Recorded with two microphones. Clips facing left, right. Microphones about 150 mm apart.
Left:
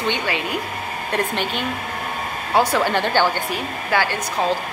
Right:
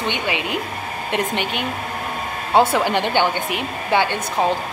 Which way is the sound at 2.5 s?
25° right (ahead or behind).